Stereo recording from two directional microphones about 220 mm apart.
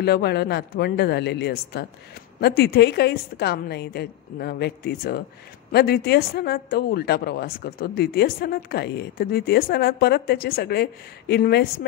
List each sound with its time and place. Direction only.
0.0 s speech: 50° left (ahead or behind)